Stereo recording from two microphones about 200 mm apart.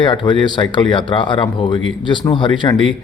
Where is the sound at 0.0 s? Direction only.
25° left (ahead or behind).